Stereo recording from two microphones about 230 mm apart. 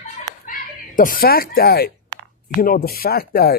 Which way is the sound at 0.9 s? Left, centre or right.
Left.